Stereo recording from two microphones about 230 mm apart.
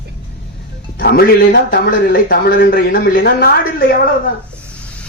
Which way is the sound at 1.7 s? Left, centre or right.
Left.